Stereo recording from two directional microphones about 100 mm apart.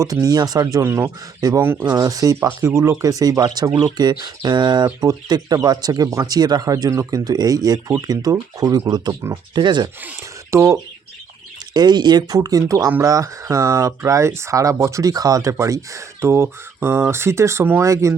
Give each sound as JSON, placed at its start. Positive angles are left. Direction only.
{"t": 0.0, "sound": "speech", "side_deg": -35}
{"t": 9.2, "sound": "speech", "side_deg": -25}
{"t": 9.6, "sound": "speech", "side_deg": -45}
{"t": 10.5, "sound": "speech", "side_deg": -30}
{"t": 11.7, "sound": "speech", "side_deg": -45}